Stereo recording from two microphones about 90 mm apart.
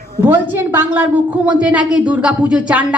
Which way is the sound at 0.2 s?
25° right (ahead or behind).